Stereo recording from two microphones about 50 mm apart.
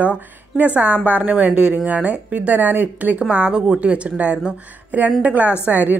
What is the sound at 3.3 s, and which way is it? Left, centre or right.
A woman's voice, right.